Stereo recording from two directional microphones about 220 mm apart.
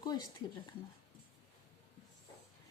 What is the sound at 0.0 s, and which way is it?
Speech, 20° left (ahead or behind).